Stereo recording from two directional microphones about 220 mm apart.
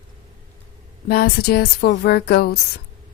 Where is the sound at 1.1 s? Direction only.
45° left (ahead or behind).